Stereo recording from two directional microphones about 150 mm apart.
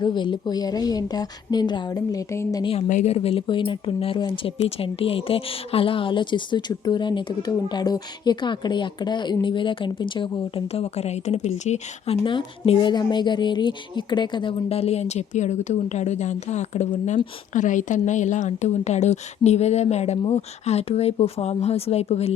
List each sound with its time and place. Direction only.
0.0 s a woman's voice: 30° left (ahead or behind)
2.9 s speech: 45° left (ahead or behind)
12.2 s a woman's voice: 35° left (ahead or behind)